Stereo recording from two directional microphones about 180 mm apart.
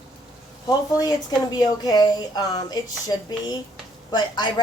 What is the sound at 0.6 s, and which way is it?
Speech, 20° left (ahead or behind).